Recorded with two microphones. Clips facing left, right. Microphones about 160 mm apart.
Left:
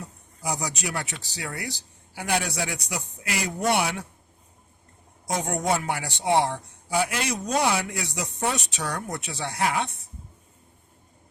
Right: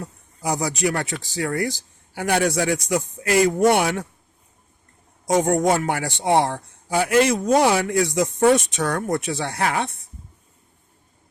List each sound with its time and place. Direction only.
0.0 s speech: 65° right (ahead or behind)
5.4 s speech: 50° right (ahead or behind)